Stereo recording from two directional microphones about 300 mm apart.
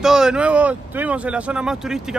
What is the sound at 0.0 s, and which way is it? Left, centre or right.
Speech, centre.